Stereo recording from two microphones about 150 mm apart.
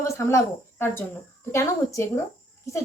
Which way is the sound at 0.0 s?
20° left (ahead or behind).